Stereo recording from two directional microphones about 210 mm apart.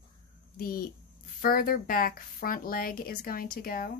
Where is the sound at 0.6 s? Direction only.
45° left (ahead or behind).